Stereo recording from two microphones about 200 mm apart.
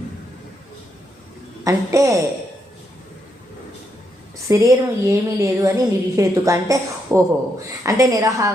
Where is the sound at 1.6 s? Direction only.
15° right (ahead or behind).